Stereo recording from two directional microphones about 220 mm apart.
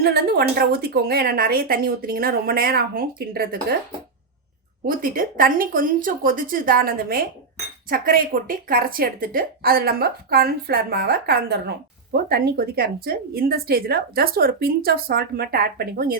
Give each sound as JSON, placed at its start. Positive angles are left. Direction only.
{"t": 0.0, "sound": "a woman's voice", "side_deg": -45}
{"t": 4.9, "sound": "a woman's voice", "side_deg": -40}